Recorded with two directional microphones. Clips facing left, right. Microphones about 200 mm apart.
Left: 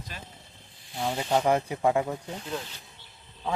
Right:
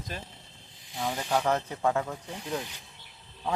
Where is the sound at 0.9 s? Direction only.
15° left (ahead or behind).